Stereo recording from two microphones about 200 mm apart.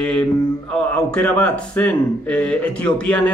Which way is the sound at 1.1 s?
5° left (ahead or behind).